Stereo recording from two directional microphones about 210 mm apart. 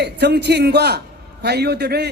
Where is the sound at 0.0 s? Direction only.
50° right (ahead or behind).